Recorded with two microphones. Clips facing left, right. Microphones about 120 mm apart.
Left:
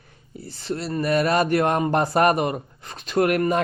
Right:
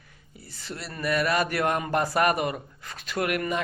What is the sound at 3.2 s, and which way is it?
Speech, 35° left (ahead or behind).